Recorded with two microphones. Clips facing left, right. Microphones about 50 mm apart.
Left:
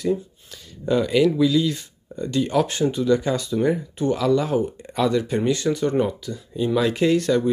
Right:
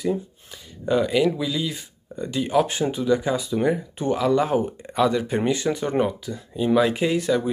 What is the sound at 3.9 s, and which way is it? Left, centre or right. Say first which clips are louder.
Speech: even; right.